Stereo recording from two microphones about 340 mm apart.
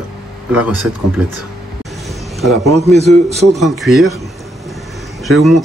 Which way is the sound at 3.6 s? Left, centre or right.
Centre.